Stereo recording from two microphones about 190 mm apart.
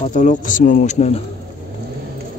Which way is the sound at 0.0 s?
40° left (ahead or behind).